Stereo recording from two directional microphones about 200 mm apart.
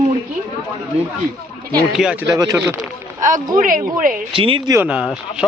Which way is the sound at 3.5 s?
40° right (ahead or behind).